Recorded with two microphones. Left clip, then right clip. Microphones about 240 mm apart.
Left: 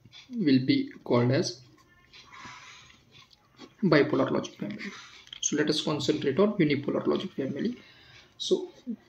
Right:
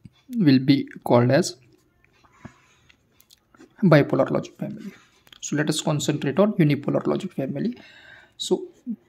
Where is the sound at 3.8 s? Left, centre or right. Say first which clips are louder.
Right 5 dB; right.